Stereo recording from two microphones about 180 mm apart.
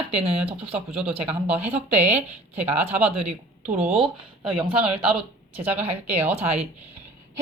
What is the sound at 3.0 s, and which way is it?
Speech, 40° right (ahead or behind).